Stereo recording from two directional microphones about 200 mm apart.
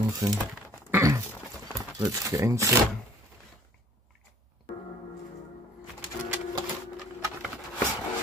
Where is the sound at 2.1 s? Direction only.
15° right (ahead or behind).